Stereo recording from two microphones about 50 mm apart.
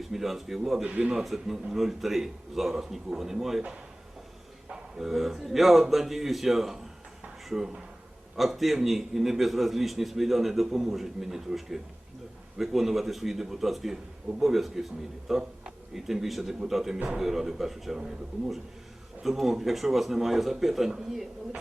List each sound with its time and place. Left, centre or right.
0.0 s a man's voice: centre
0.9 s a man's voice: right
1.2 s a man's voice: centre
4.7 s a man's voice: centre